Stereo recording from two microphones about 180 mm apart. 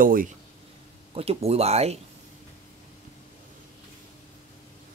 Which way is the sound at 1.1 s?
35° right (ahead or behind).